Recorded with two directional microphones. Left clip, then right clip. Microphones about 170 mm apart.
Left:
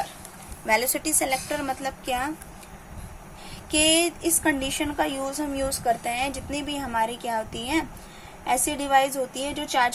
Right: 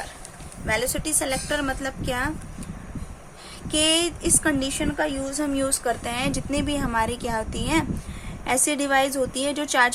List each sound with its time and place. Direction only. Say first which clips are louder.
0.7 s a woman's voice: left 2 dB; centre (ahead or behind)
3.7 s a woman's voice: even; 10° right (ahead or behind); by 9.9 s 25° right (ahead or behind)